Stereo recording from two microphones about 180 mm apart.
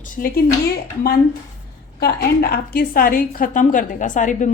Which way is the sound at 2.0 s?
60° left (ahead or behind).